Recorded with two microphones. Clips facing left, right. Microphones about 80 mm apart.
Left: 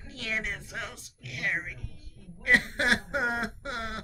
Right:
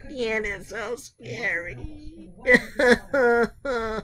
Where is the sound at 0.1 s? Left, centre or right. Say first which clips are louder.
Right 8 dB; right.